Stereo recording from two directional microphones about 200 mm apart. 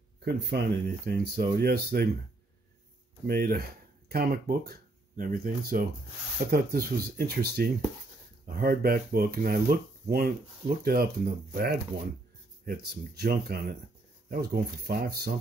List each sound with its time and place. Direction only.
0.2 s speech: 55° right (ahead or behind)
3.3 s speech: 50° right (ahead or behind)